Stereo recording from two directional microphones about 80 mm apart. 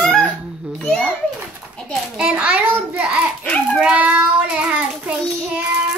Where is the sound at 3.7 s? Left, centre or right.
Centre.